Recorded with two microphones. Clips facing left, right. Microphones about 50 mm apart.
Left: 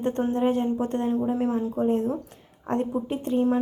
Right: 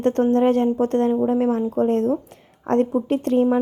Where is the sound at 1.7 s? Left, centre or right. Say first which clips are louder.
Right 5 dB; right.